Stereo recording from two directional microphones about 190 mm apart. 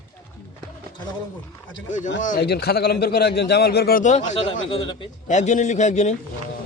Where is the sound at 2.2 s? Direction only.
50° left (ahead or behind).